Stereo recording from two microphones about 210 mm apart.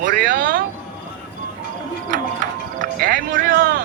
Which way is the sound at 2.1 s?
40° right (ahead or behind).